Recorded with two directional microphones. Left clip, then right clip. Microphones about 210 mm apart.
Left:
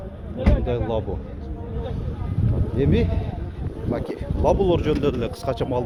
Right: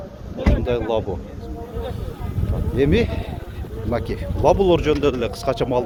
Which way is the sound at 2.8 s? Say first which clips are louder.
Right 4 dB; 25° right (ahead or behind).